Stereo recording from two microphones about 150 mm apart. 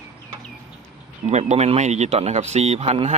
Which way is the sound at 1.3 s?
45° right (ahead or behind).